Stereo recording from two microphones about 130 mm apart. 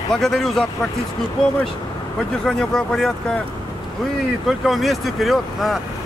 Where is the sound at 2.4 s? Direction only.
5° left (ahead or behind).